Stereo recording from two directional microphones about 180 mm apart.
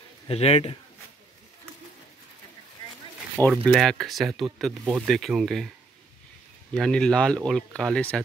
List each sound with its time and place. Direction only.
0.3 s a man's voice: 35° left (ahead or behind)
3.4 s speech: 5° left (ahead or behind)
6.7 s speech: 5° left (ahead or behind)